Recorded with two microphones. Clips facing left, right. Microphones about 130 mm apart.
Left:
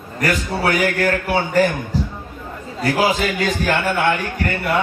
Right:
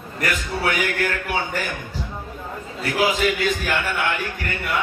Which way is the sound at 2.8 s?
35° left (ahead or behind).